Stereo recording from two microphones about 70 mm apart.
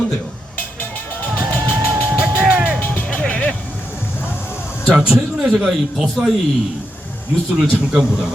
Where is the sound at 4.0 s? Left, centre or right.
Left.